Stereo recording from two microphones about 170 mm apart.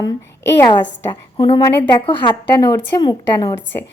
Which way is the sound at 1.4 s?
25° left (ahead or behind).